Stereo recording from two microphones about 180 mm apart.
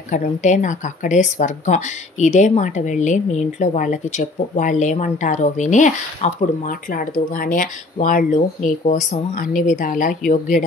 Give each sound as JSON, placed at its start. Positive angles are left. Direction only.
{"t": 0.1, "sound": "speech", "side_deg": 45}